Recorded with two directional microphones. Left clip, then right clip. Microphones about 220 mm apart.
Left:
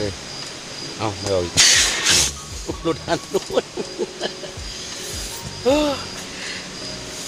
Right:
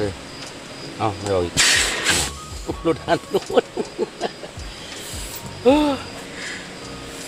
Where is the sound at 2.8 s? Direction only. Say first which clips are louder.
Right 2 dB; 30° right (ahead or behind).